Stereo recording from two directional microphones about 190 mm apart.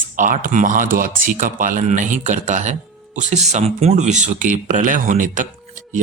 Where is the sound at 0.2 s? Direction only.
45° right (ahead or behind).